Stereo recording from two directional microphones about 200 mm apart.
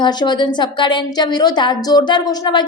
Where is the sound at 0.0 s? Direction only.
20° left (ahead or behind).